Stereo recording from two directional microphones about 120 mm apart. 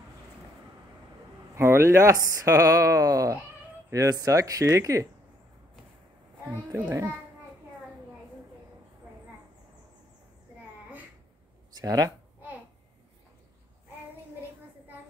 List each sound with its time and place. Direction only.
1.5 s speech: 20° right (ahead or behind)
6.7 s speech: 20° right (ahead or behind)
11.8 s speech: 30° right (ahead or behind)